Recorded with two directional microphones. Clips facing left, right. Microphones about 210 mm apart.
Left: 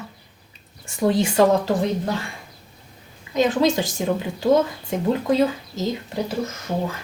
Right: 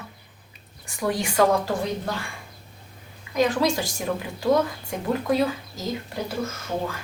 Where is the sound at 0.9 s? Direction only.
25° left (ahead or behind).